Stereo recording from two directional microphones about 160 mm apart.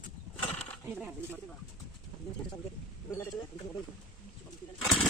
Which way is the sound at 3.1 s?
25° left (ahead or behind).